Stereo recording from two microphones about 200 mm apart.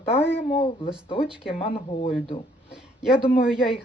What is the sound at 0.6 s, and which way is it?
Speech, 25° left (ahead or behind).